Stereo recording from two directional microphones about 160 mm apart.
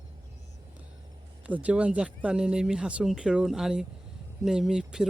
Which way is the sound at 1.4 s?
10° right (ahead or behind).